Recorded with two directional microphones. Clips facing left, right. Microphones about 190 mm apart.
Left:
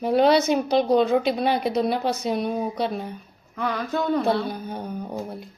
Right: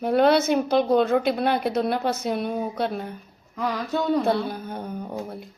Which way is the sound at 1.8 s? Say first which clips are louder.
Left 1 dB; centre (ahead or behind).